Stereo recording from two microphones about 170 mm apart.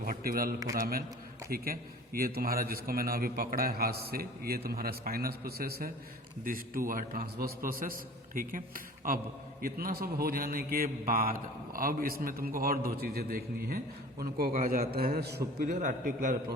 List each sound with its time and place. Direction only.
0.0 s a man's voice: 60° right (ahead or behind)
15.7 s a man's voice: 50° right (ahead or behind)